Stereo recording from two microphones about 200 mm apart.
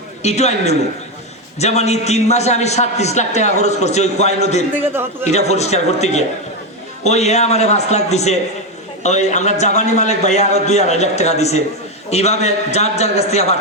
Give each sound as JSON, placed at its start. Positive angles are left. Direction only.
{"t": 0.2, "sound": "a man's voice", "side_deg": 35}